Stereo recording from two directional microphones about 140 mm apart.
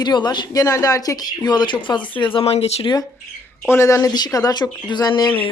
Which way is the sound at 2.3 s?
45° left (ahead or behind).